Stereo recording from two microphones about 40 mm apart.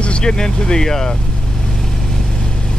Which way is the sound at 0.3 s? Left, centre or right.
Centre.